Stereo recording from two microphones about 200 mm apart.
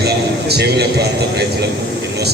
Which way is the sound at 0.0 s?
55° right (ahead or behind).